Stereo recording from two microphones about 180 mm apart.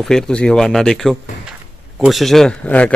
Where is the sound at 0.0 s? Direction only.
5° left (ahead or behind).